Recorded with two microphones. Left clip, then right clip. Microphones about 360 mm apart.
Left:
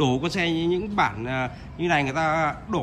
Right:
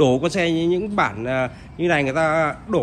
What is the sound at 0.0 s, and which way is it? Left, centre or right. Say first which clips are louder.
A man's voice: right 6 dB; centre.